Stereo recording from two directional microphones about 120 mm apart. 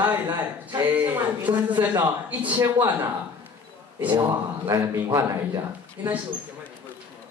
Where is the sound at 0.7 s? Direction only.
15° right (ahead or behind).